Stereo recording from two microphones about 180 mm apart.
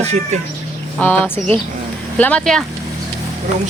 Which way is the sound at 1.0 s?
10° left (ahead or behind).